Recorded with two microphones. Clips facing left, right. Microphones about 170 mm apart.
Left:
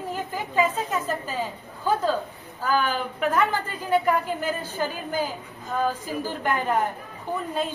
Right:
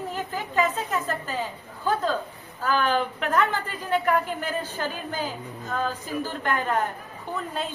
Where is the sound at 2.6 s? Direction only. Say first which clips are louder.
Right 1 dB; 10° left (ahead or behind).